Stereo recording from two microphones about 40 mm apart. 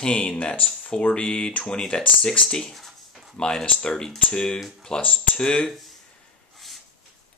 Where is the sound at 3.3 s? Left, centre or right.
Left.